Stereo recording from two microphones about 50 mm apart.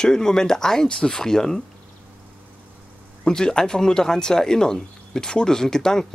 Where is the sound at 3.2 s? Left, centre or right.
Centre.